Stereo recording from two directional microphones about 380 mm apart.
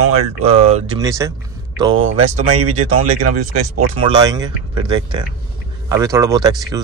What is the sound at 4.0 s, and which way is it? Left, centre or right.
Speech, centre.